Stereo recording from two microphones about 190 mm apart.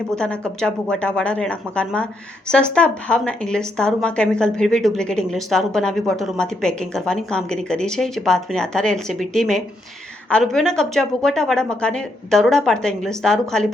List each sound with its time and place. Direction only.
0.2 s a woman's voice: 5° left (ahead or behind)